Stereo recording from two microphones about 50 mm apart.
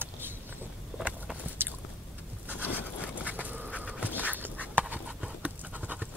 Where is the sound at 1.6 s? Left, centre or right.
Right.